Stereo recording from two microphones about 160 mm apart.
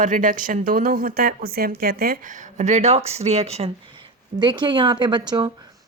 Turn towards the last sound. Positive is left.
turn(degrees=-25)  # may be behind; listen again after turning